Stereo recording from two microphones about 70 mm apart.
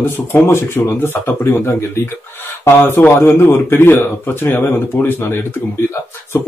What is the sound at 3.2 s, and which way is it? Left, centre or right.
Speech, left.